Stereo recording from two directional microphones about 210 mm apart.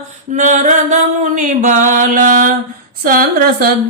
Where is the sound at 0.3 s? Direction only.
35° right (ahead or behind).